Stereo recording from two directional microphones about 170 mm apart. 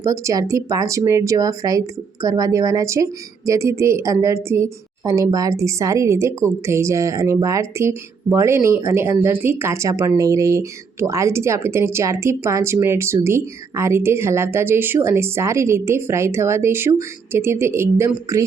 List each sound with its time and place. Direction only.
0.0 s speech: 20° right (ahead or behind)